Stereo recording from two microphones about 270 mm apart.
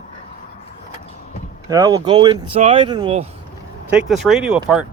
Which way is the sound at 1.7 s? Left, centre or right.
Centre.